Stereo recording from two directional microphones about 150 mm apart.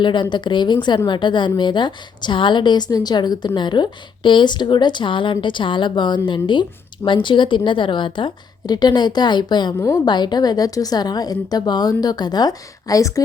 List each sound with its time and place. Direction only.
0.0 s a woman's voice: 30° left (ahead or behind)